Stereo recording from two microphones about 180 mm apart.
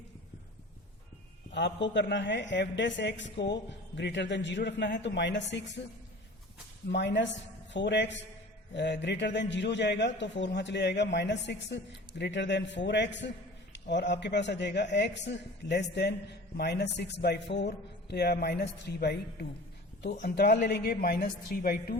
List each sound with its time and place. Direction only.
1.5 s a man's voice: 80° left
6.9 s a man's voice: 80° left; by 21.9 s 55° left (ahead or behind)